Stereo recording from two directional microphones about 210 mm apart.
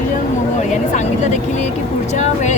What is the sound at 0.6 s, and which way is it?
Speech, 35° left (ahead or behind).